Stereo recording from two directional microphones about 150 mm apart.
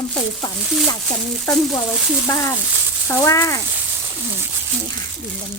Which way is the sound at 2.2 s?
20° left (ahead or behind).